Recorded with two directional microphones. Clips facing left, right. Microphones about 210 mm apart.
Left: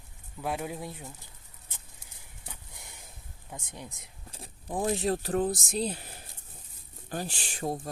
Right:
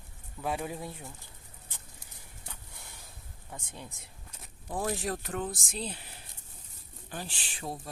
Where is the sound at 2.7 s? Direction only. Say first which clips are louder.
Left 1 dB; 15° left (ahead or behind).